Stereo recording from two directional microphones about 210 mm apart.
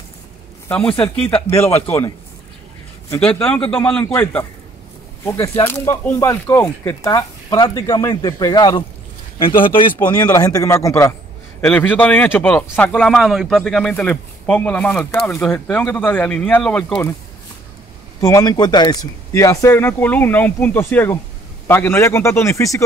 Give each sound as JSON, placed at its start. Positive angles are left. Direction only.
{"t": 0.7, "sound": "speech", "side_deg": 5}
{"t": 18.2, "sound": "speech", "side_deg": 15}